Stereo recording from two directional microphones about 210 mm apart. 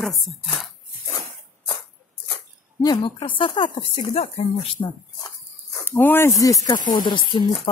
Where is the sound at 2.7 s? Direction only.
20° left (ahead or behind).